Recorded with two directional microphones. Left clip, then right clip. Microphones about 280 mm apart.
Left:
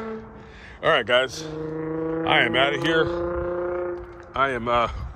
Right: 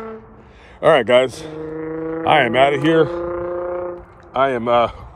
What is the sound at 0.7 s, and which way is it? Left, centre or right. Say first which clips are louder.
Speech: right 7 dB; centre.